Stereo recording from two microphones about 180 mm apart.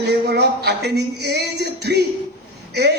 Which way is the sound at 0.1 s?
70° right (ahead or behind).